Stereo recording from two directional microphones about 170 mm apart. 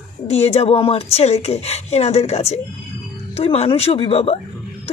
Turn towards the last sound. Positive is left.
turn(degrees=35)  # may be behind; listen again after turning